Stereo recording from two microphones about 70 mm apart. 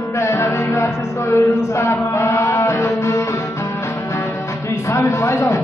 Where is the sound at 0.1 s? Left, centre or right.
Left.